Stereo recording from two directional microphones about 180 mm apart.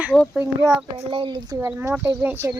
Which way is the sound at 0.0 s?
Centre (ahead or behind).